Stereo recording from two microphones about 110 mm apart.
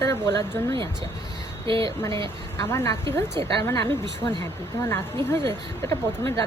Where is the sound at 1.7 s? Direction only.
50° right (ahead or behind).